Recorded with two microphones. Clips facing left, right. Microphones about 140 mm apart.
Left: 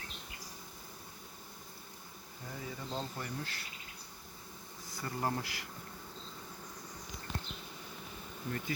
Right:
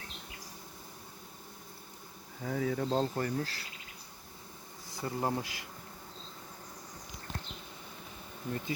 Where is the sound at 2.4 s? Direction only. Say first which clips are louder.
Right 12 dB; 90° right; by 3.3 s 60° right (ahead or behind).